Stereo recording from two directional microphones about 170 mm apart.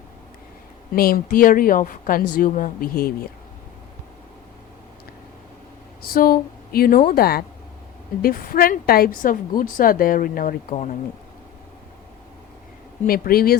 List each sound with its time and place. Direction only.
0.9 s a woman's voice: 60° left (ahead or behind)
6.0 s a woman's voice: 60° left (ahead or behind)
13.1 s a woman's voice: 60° left (ahead or behind)